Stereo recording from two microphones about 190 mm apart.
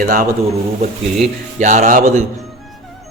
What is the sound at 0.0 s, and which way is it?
Speech, 50° right (ahead or behind).